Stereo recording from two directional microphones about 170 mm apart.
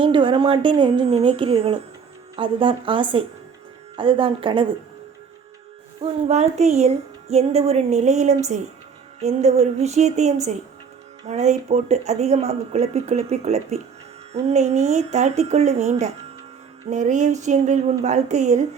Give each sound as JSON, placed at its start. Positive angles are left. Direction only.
{"t": 0.0, "sound": "speech", "side_deg": -30}
{"t": 6.0, "sound": "speech", "side_deg": -40}